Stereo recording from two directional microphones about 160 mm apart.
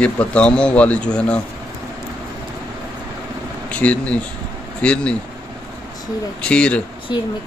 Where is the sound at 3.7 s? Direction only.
10° left (ahead or behind).